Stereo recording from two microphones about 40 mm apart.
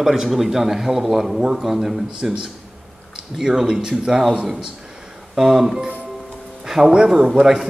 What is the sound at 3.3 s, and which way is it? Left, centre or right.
Speech, centre.